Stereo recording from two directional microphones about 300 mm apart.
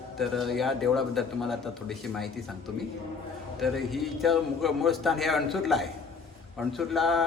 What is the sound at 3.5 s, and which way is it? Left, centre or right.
A man's voice, centre.